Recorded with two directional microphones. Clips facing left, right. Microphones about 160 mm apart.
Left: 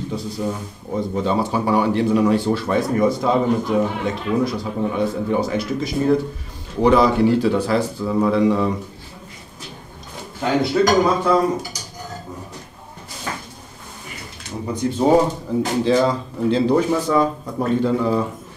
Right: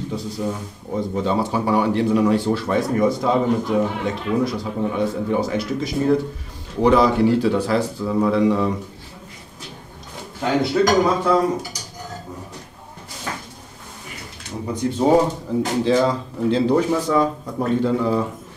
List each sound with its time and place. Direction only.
1.2 s speech: 20° left (ahead or behind)
10.4 s speech: 15° left (ahead or behind)
11.7 s cutlery: 10° left (ahead or behind)
13.3 s drawer open or close: 15° left (ahead or behind)
15.0 s speech: 20° left (ahead or behind)